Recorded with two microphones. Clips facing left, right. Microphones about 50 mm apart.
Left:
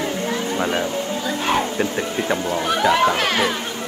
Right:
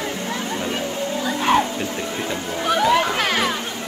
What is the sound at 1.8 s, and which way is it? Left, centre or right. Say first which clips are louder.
Speech: left 3 dB; left.